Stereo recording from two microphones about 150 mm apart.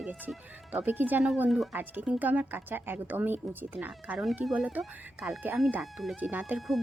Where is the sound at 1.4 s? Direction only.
Centre (ahead or behind).